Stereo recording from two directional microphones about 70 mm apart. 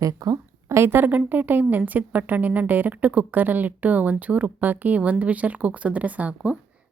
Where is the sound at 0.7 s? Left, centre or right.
Right.